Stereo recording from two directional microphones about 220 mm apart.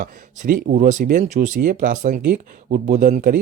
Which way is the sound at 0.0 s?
35° right (ahead or behind).